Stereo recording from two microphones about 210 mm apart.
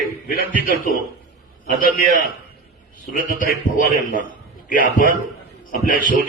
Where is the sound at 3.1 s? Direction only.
40° left (ahead or behind).